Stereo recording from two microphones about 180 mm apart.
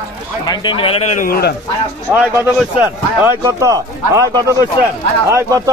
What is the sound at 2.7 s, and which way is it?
Speech, 10° right (ahead or behind).